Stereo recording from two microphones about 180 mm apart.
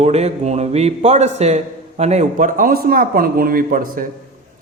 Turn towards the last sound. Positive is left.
turn(degrees=-50)  # may be behind; listen again after turning